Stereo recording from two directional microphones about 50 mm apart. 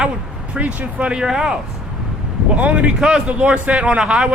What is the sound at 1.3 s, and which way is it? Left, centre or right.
Speech, centre.